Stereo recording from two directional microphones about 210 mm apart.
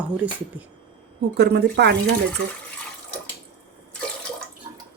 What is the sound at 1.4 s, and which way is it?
Speech, 50° right (ahead or behind).